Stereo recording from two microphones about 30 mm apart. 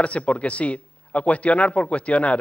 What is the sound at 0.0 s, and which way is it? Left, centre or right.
Speech, left.